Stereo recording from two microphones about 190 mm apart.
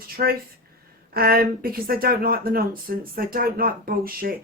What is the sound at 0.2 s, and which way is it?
Speech, 50° right (ahead or behind).